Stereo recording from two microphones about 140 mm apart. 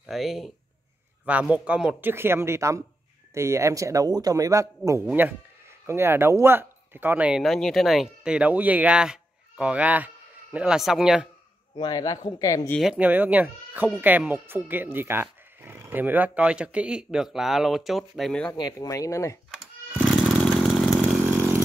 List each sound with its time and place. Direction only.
0.0 s speech: centre (ahead or behind)
7.4 s speech: centre (ahead or behind)
11.7 s speech: 30° left (ahead or behind)
12.7 s speech: 5° right (ahead or behind)
18.5 s speech: 25° left (ahead or behind)
20.1 s chainsaw: centre (ahead or behind)
21.3 s chainsaw: 15° right (ahead or behind)